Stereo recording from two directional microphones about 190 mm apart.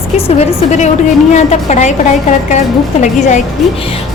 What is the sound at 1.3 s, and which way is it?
Speech, 40° left (ahead or behind).